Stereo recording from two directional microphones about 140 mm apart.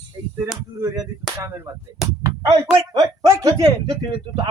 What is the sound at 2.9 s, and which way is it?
Speech, 25° right (ahead or behind).